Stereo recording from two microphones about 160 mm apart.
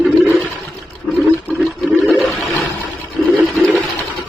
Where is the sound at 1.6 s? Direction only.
Centre (ahead or behind).